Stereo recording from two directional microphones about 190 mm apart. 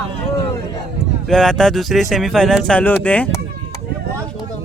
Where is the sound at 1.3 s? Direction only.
5° left (ahead or behind).